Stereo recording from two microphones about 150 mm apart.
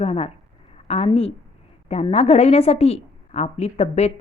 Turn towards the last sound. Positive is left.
turn(degrees=45)  # may be behind; listen again after turning